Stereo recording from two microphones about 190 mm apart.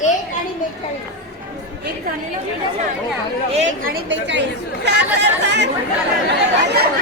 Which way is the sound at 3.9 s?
70° right (ahead or behind).